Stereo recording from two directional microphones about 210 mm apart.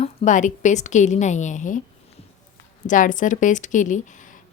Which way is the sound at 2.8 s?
40° left (ahead or behind).